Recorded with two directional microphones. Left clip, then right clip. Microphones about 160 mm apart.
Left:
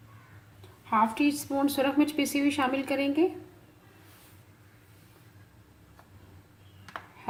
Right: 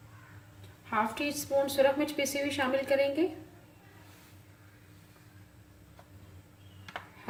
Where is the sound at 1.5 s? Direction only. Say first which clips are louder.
Right 1 dB; 40° left (ahead or behind).